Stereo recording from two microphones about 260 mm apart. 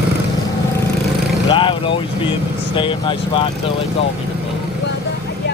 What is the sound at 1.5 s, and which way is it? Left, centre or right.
Vehicle, centre.